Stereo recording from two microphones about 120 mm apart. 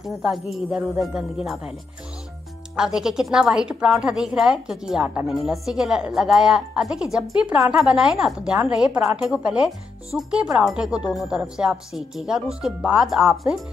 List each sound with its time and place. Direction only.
0.1 s a woman's voice: centre (ahead or behind)
2.7 s a woman's voice: 5° right (ahead or behind)